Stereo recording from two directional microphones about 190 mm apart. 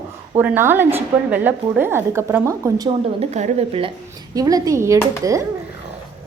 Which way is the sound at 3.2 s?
35° right (ahead or behind).